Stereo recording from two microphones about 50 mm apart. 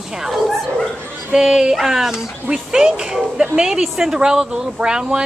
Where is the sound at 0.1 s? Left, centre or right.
Centre.